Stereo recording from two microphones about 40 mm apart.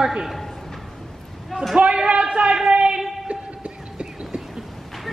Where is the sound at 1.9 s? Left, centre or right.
Right.